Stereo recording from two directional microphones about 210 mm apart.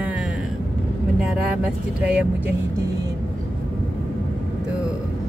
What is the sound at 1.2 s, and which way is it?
Speech, 5° right (ahead or behind).